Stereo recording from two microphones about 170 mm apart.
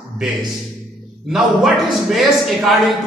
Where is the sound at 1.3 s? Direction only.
Centre (ahead or behind).